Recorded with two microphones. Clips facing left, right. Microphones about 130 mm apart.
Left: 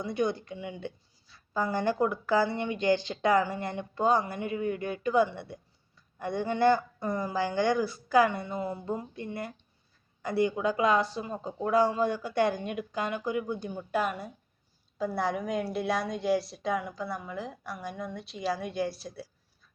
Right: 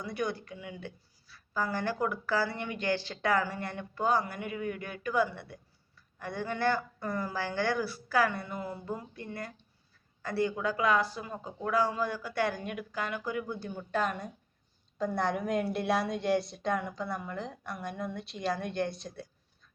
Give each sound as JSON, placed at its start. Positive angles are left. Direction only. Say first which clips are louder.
{"t": 0.0, "sound": "a woman's voice", "louder": "left 5 dB", "side_deg": 25}